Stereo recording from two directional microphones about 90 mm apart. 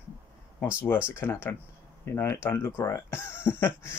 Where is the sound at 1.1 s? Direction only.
30° left (ahead or behind).